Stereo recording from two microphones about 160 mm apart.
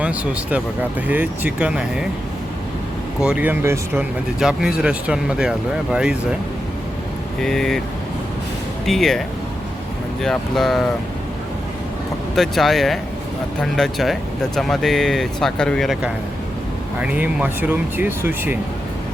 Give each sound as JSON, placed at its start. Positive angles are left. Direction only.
{"t": 0.0, "sound": "speech", "side_deg": -10}
{"t": 3.2, "sound": "speech", "side_deg": -5}
{"t": 4.4, "sound": "speech", "side_deg": -5}
{"t": 7.4, "sound": "speech", "side_deg": 5}
{"t": 8.9, "sound": "speech", "side_deg": 0}
{"t": 10.2, "sound": "speech", "side_deg": 0}
{"t": 12.3, "sound": "speech", "side_deg": 0}